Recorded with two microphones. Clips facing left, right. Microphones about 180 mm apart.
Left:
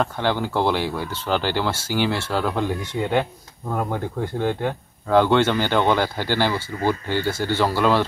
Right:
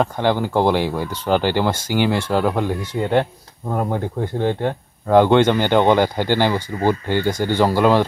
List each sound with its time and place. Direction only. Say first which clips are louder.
0.0 s speech: right 4 dB; 15° right (ahead or behind)